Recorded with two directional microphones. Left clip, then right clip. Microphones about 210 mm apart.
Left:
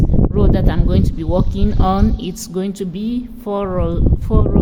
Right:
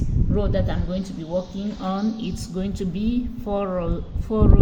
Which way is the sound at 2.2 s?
25° left (ahead or behind).